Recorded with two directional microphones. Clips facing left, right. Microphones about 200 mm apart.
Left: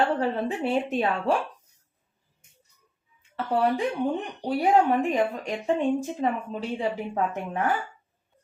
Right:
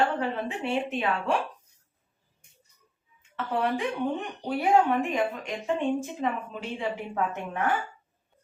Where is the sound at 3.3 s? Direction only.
35° left (ahead or behind).